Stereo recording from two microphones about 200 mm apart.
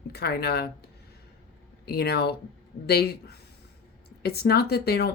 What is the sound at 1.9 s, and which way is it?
Speech, 55° left (ahead or behind).